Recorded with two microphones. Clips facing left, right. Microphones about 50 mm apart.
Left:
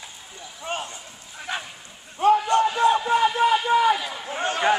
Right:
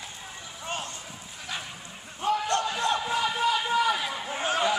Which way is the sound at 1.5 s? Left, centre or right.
Left.